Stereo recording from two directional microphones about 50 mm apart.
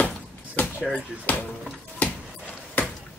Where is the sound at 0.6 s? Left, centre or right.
Left.